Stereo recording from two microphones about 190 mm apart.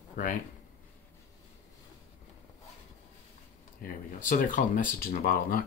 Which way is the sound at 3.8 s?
45° left (ahead or behind).